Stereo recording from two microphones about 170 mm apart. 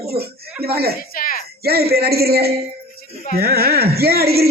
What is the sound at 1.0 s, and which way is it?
Speech, 55° left (ahead or behind).